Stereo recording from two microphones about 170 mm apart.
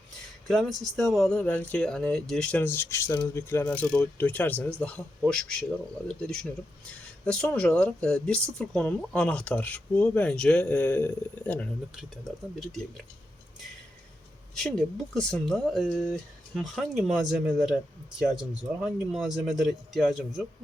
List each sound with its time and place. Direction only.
0.4 s speech: centre (ahead or behind)
15.1 s speech: 5° left (ahead or behind)